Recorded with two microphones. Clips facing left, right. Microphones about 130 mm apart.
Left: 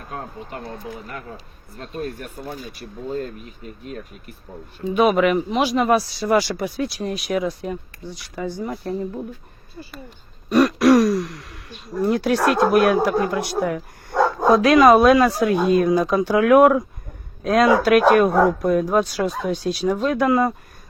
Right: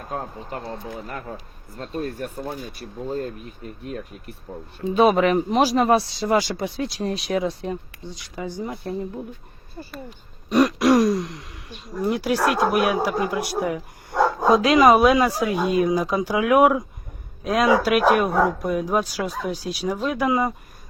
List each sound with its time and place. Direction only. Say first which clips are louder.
3.1 s speech: left 1 dB; 40° right (ahead or behind)
4.8 s speech: even; 30° right (ahead or behind)
10.5 s throat clearing: left 3 dB; 15° right (ahead or behind)
11.9 s speech: left 3 dB; 10° right (ahead or behind)